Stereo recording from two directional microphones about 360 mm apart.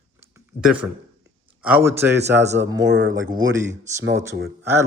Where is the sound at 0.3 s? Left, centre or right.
Centre.